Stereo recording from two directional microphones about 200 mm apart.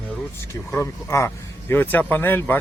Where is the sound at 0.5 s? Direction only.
15° left (ahead or behind).